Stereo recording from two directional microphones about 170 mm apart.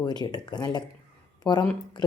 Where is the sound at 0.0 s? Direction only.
25° left (ahead or behind).